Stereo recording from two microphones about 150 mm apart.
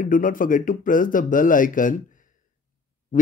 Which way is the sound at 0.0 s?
65° left (ahead or behind).